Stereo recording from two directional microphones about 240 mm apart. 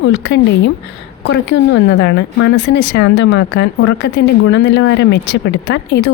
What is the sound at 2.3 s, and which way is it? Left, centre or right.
Speech, left.